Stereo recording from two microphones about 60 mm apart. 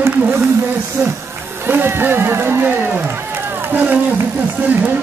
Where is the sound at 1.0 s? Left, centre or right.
Right.